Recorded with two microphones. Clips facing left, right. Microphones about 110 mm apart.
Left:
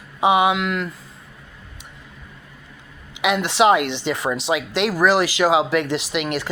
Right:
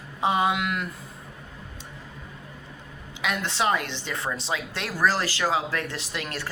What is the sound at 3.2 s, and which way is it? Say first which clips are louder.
Speech: left 9 dB; 75° left (ahead or behind).